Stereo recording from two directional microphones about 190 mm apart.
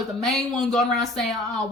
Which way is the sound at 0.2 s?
Centre (ahead or behind).